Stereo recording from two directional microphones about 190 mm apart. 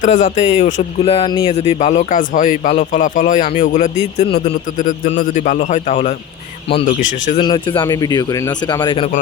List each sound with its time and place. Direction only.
0.0 s a man's voice: 40° left (ahead or behind); by 1.5 s 25° left (ahead or behind)
1.5 s a man's voice: 40° left (ahead or behind)
7.4 s speech: 25° left (ahead or behind)